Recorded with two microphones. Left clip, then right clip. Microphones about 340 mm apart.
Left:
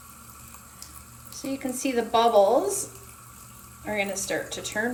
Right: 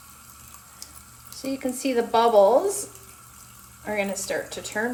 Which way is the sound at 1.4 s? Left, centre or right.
Right.